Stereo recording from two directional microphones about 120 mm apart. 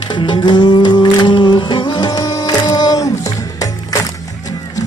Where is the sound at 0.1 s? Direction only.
40° left (ahead or behind).